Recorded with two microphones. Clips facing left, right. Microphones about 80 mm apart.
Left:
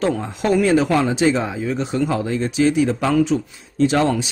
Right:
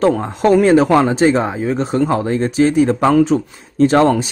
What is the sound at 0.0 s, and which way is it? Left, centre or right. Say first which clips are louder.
Speech: right 6 dB; right.